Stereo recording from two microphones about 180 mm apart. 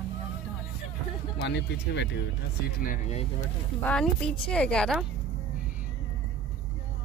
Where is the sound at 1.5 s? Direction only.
70° left (ahead or behind).